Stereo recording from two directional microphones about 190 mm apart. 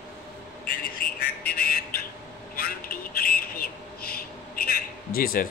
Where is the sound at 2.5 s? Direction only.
50° left (ahead or behind).